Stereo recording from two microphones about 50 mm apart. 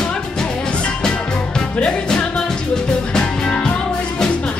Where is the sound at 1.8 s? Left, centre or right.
Centre.